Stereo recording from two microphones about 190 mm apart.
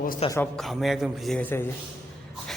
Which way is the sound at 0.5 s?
Centre (ahead or behind).